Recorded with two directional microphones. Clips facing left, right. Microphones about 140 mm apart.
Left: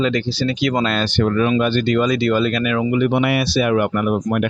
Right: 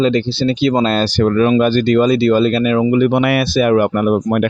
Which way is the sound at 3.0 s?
60° right (ahead or behind).